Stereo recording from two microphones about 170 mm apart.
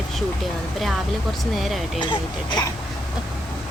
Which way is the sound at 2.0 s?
25° left (ahead or behind).